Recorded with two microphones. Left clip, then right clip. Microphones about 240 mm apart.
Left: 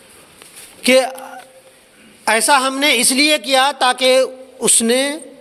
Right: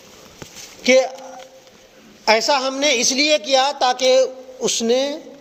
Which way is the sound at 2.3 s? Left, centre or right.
Left.